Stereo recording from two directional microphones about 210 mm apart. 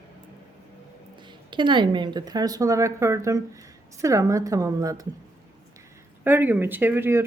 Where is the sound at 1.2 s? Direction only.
20° right (ahead or behind).